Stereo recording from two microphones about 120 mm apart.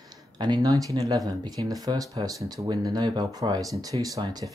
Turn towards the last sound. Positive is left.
turn(degrees=-35)  # may be behind; listen again after turning